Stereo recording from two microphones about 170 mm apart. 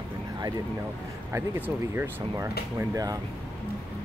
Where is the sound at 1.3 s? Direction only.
15° right (ahead or behind).